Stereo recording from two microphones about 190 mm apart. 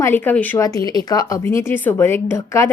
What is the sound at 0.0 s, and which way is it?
A woman's voice, 10° left (ahead or behind).